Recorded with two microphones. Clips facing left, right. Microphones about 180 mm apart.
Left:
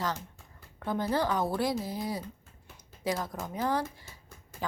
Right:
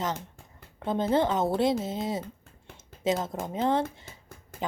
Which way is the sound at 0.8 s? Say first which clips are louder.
Right 4 dB; 20° right (ahead or behind).